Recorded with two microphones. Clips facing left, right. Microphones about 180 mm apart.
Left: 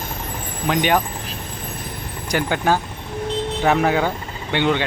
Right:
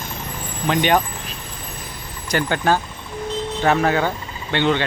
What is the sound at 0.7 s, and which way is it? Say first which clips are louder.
Speech: right 1 dB; 5° left (ahead or behind).